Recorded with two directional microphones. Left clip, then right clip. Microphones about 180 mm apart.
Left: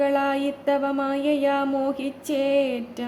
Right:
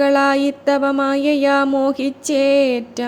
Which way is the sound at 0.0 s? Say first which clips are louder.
Right 7 dB; 30° right (ahead or behind).